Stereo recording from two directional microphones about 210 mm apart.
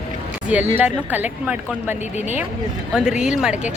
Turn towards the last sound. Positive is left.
turn(degrees=-5)  # may be behind; listen again after turning